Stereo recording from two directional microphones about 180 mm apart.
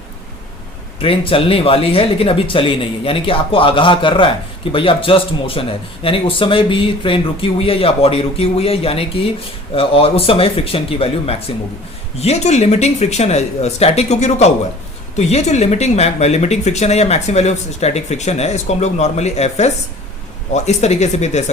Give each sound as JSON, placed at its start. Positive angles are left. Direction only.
{"t": 0.9, "sound": "speech", "side_deg": 30}